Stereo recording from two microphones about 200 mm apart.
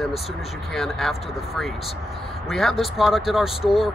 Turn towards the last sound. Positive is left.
turn(degrees=0)  # may be behind; listen again after turning